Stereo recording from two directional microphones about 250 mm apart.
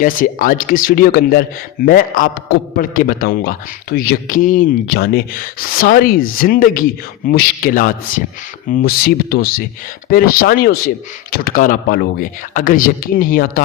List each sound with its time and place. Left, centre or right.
0.0 s a man's voice: left